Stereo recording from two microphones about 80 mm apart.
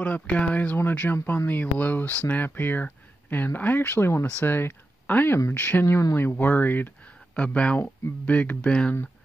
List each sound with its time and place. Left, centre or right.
0.0 s speech: centre